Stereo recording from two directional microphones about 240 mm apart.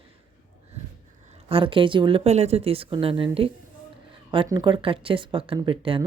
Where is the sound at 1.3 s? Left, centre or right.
Right.